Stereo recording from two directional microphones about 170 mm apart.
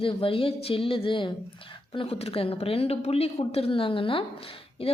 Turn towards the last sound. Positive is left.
turn(degrees=30)  # may be behind; listen again after turning